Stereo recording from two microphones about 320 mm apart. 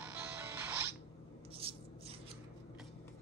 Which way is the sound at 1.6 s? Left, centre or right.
Centre.